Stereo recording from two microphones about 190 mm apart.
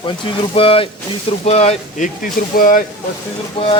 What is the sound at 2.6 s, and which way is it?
Speech, 45° left (ahead or behind).